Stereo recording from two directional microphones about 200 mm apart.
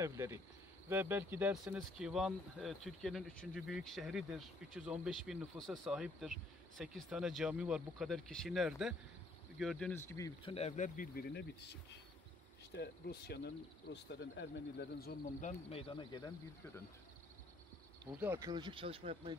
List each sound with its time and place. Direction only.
0.0 s speech: 15° right (ahead or behind); by 10.5 s 15° left (ahead or behind)
10.5 s speech: 35° left (ahead or behind); by 15.5 s 50° left (ahead or behind)
15.7 s speech: 25° left (ahead or behind)
18.2 s speech: 15° right (ahead or behind)